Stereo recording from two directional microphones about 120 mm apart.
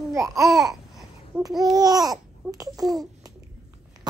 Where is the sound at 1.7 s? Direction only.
35° right (ahead or behind).